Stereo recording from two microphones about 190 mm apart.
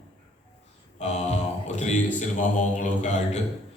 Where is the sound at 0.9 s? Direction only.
35° left (ahead or behind).